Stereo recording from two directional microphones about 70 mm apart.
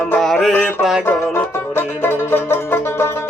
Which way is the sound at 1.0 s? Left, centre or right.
Left.